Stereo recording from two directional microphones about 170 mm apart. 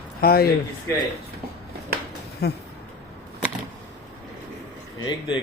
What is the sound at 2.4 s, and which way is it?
Speech, 70° left (ahead or behind).